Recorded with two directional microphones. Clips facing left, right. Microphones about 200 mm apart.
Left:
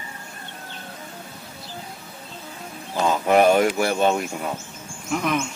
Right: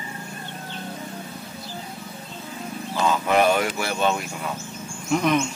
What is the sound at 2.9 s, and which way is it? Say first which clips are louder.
Speech: left 3 dB; 45° left (ahead or behind).